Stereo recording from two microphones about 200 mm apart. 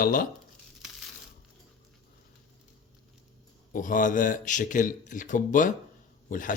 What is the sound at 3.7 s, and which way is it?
Speech, 40° left (ahead or behind).